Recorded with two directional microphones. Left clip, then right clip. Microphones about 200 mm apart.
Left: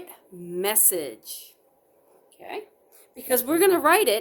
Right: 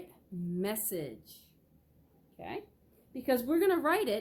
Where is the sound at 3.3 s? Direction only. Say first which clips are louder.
Left 8 dB; 50° left (ahead or behind).